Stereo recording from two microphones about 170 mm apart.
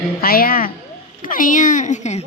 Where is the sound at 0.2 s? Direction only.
60° left (ahead or behind); by 2.2 s 45° left (ahead or behind).